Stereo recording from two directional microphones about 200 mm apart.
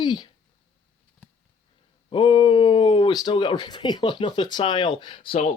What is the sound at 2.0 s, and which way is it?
Speech, 25° left (ahead or behind).